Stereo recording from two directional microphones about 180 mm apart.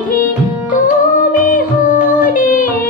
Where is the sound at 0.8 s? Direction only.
50° left (ahead or behind).